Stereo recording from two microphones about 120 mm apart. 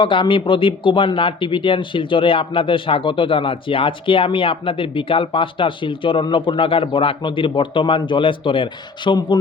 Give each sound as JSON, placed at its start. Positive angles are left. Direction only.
{"t": 0.0, "sound": "speech", "side_deg": 45}